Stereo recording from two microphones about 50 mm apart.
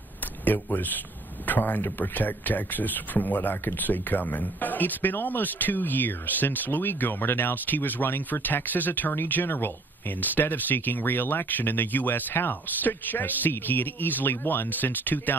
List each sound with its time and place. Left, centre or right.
0.5 s speech: left